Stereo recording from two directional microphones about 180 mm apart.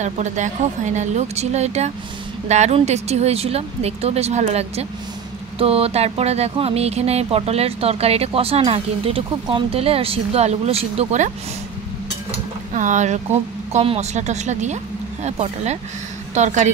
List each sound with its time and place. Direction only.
0.0 s speech: 40° right (ahead or behind)
12.7 s speech: 40° right (ahead or behind)